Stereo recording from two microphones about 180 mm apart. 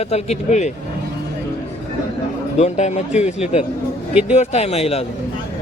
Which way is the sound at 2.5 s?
40° left (ahead or behind).